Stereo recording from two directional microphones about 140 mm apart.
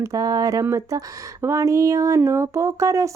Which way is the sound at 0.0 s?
25° right (ahead or behind).